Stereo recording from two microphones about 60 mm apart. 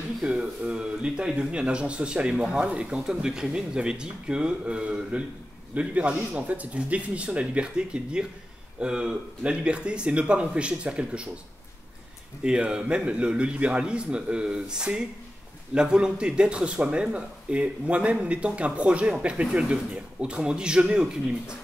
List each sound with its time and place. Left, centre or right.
0.2 s speech: centre
12.4 s speech: centre